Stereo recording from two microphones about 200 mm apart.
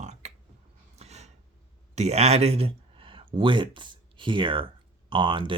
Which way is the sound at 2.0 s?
30° right (ahead or behind).